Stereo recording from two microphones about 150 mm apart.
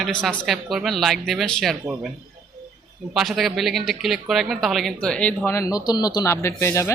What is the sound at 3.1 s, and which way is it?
Speech, centre (ahead or behind).